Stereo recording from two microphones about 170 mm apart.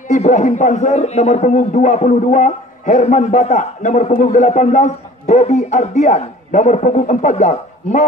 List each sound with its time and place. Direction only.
0.1 s a man's voice: 45° left (ahead or behind)